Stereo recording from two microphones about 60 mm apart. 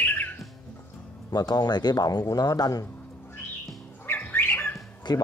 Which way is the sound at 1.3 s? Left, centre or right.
Left.